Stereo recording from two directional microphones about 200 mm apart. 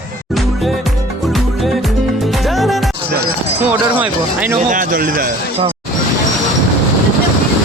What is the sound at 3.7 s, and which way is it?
Speech, 10° right (ahead or behind).